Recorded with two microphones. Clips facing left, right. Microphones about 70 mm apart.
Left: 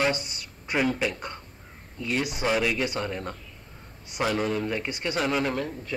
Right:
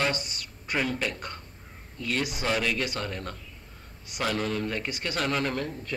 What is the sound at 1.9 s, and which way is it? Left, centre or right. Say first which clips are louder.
A man's voice: left 2 dB; centre.